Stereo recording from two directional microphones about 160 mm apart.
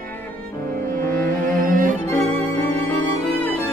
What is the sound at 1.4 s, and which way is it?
Cello, 60° right (ahead or behind).